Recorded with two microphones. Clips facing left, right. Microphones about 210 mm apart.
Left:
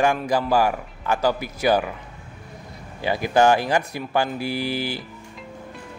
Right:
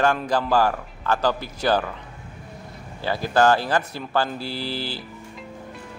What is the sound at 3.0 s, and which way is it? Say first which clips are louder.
A man's voice: left 1 dB; 15° left (ahead or behind).